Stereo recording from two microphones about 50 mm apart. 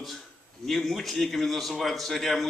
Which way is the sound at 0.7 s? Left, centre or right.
Centre.